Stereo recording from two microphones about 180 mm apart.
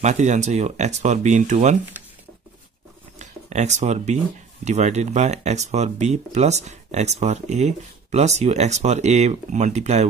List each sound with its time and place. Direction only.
0.0 s speech: 40° right (ahead or behind)
3.2 s speech: 40° right (ahead or behind)